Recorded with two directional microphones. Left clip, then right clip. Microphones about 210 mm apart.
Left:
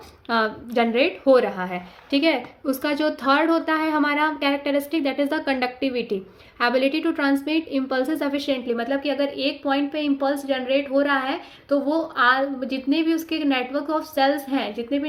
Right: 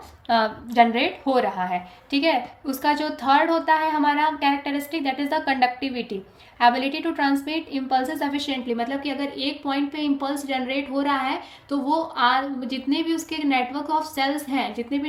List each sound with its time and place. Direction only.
0.3 s a woman's voice: 15° left (ahead or behind)